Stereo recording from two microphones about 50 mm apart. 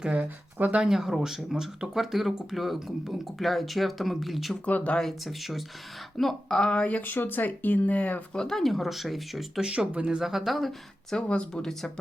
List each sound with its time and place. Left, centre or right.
0.0 s speech: right
0.8 s speech: centre
4.6 s speech: left
5.2 s speech: centre
6.7 s speech: left
8.3 s speech: centre
9.6 s speech: centre
10.2 s speech: centre
11.2 s speech: left